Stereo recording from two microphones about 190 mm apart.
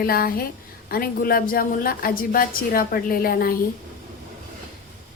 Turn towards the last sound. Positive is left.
turn(degrees=50)  # may be behind; listen again after turning